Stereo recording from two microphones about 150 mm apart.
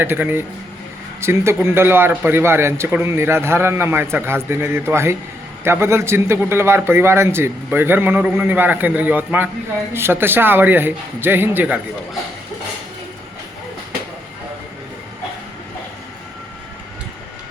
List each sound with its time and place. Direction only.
0.0 s a man's voice: 15° right (ahead or behind)